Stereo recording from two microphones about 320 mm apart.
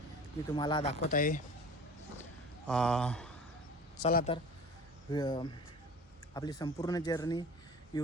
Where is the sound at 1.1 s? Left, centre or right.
Left.